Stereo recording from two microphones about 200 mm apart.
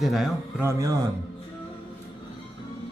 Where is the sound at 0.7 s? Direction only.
15° right (ahead or behind).